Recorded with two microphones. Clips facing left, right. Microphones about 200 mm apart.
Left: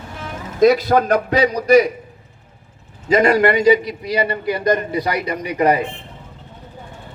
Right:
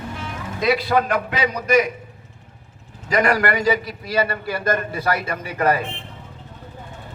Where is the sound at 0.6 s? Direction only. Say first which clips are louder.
Left 6 dB; 45° left (ahead or behind).